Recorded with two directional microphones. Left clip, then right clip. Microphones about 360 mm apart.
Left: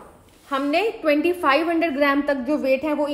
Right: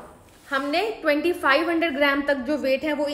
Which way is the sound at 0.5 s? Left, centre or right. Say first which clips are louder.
Left 2 dB; centre.